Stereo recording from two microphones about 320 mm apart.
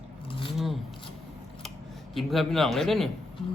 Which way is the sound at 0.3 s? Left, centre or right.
Centre.